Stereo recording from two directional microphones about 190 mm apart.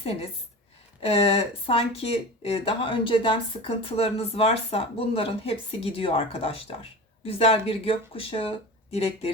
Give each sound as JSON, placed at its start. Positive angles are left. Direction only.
{"t": 0.0, "sound": "speech", "side_deg": 30}